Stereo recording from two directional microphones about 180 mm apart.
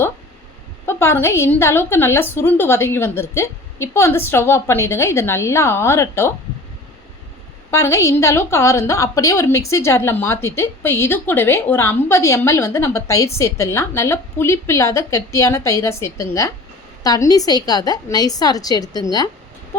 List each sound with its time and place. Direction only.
0.9 s a woman's voice: 15° left (ahead or behind)
7.7 s a woman's voice: 15° left (ahead or behind)